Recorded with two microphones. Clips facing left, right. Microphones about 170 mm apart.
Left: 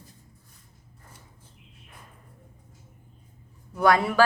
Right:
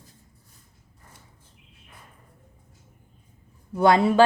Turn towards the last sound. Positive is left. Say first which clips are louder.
# right 3 dB
turn(degrees=-25)  # may be behind; listen again after turning